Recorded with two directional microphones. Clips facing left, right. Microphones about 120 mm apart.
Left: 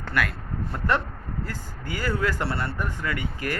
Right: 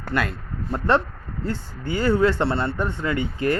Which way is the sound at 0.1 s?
25° right (ahead or behind).